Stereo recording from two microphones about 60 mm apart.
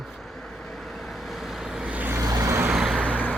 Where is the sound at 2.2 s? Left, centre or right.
Right.